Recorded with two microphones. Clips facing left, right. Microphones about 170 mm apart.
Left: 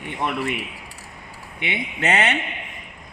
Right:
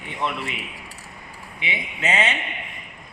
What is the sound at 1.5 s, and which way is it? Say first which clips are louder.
Mantra: left 4 dB; 60° left (ahead or behind).